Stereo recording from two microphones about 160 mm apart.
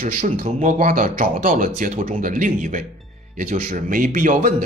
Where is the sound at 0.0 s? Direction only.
60° right (ahead or behind).